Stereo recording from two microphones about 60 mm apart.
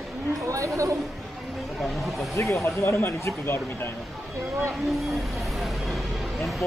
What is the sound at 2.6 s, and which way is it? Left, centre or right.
Speech, left.